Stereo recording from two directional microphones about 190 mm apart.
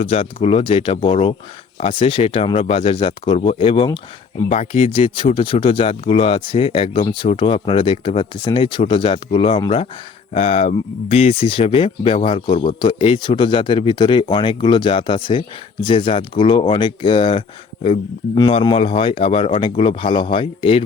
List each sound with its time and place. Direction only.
0.0 s speech: 30° left (ahead or behind)
4.4 s speech: 35° left (ahead or behind)